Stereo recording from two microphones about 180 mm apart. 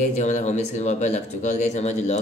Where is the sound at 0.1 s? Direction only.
40° left (ahead or behind).